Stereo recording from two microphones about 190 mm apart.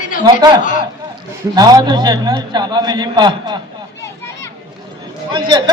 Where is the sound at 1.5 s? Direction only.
20° right (ahead or behind).